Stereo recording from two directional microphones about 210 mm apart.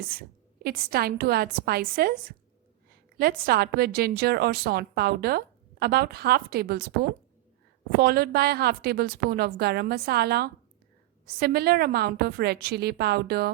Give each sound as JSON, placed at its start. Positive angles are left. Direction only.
{"t": 0.1, "sound": "a woman's voice", "side_deg": -45}
{"t": 7.9, "sound": "a woman's voice", "side_deg": -45}